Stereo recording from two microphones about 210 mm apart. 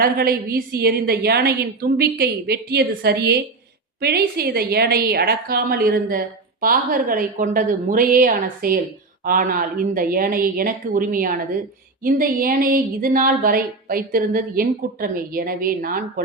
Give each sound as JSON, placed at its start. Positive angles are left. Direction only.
{"t": 0.0, "sound": "a woman's voice", "side_deg": -45}